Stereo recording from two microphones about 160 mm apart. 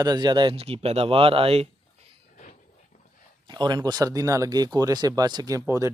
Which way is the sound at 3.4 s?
25° right (ahead or behind).